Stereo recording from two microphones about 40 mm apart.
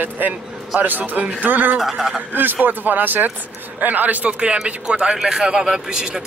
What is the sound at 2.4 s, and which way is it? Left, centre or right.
Speech, right.